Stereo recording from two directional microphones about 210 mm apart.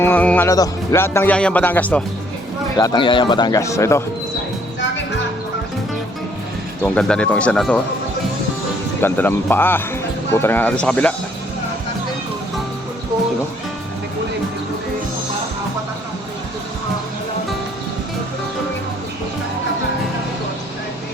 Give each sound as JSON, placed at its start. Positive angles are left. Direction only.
{"t": 0.0, "sound": "speech", "side_deg": 10}
{"t": 2.7, "sound": "speech", "side_deg": 20}
{"t": 6.8, "sound": "speech", "side_deg": 5}
{"t": 9.0, "sound": "speech", "side_deg": 10}